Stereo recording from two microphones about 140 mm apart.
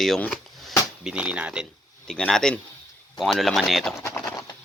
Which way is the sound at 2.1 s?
5° left (ahead or behind).